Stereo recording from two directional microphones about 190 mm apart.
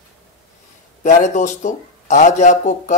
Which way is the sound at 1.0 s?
40° left (ahead or behind).